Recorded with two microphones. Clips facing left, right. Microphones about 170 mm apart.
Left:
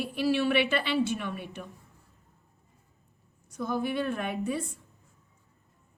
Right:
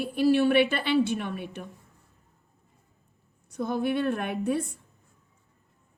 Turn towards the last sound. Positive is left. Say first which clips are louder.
# right 3 dB
turn(degrees=-55)  # may be behind; listen again after turning